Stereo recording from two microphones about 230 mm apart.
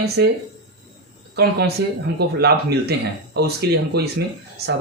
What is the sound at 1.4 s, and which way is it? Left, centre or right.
Speech, right.